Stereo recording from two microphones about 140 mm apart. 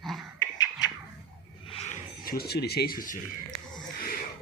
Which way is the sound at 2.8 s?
85° left.